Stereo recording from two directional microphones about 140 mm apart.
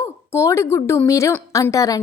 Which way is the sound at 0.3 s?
20° left (ahead or behind).